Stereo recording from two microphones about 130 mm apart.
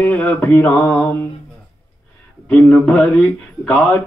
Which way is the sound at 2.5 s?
10° left (ahead or behind).